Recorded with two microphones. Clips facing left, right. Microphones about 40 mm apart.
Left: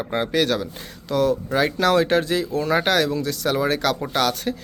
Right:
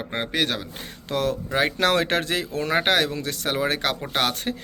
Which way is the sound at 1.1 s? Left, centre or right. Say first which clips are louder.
Left 5 dB; right.